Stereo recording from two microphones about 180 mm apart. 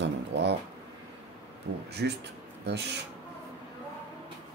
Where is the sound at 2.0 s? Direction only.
60° right (ahead or behind).